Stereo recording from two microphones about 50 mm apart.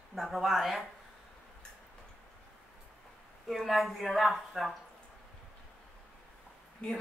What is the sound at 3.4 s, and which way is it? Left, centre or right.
Speech, centre.